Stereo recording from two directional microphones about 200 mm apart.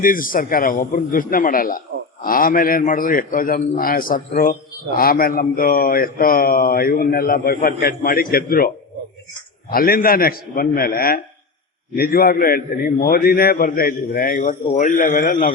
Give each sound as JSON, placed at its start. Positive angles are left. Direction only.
{"t": 0.0, "sound": "speech", "side_deg": 45}